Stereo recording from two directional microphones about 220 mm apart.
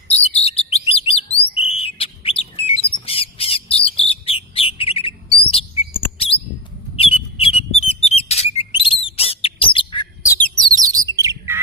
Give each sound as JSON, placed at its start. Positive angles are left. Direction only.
{"t": 0.1, "sound": "chirp", "side_deg": 30}
{"t": 1.5, "sound": "bird", "side_deg": 25}
{"t": 5.4, "sound": "a sound", "side_deg": 25}
{"t": 6.1, "sound": "bird", "side_deg": 25}
{"t": 6.9, "sound": "a sound", "side_deg": 25}
{"t": 10.6, "sound": "bird", "side_deg": -15}